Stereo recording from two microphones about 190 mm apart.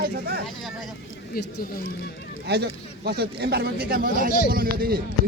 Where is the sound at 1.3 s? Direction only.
55° left (ahead or behind).